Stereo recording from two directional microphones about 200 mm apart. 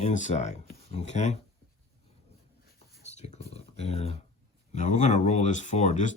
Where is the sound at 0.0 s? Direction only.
35° left (ahead or behind).